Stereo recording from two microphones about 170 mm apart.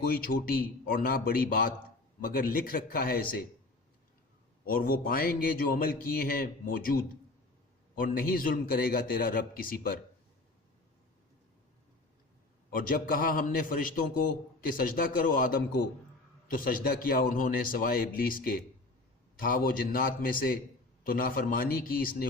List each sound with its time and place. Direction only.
0.0 s speech: 60° left (ahead or behind)
4.6 s speech: 55° left (ahead or behind)
12.7 s speech: 55° left (ahead or behind)